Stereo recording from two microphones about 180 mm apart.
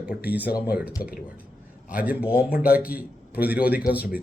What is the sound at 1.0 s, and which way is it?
Speech, 55° left (ahead or behind).